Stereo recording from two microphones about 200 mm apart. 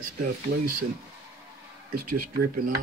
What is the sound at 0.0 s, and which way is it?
Speech, 45° right (ahead or behind).